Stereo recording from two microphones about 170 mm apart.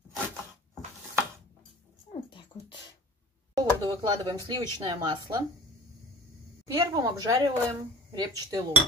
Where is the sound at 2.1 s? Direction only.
30° left (ahead or behind).